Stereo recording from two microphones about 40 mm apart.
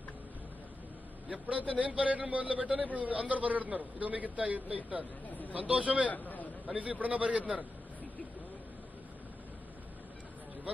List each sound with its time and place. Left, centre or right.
1.3 s a man's voice: right
6.0 s speech: left
6.6 s a man's voice: right